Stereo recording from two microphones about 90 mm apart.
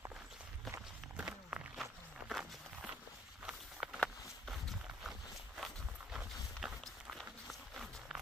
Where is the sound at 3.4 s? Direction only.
10° right (ahead or behind).